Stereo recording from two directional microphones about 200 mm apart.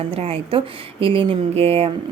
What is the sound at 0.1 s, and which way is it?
Speech, 30° right (ahead or behind).